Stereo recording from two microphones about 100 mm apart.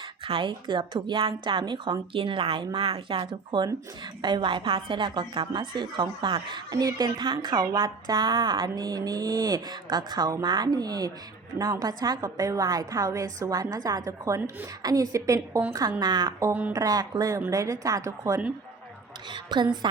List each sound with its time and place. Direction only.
0.3 s a woman's voice: 60° right (ahead or behind); by 18.3 s 35° right (ahead or behind)
19.3 s speech: 50° right (ahead or behind)